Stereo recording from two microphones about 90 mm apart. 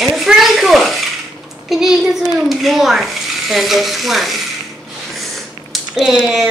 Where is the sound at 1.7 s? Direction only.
5° right (ahead or behind).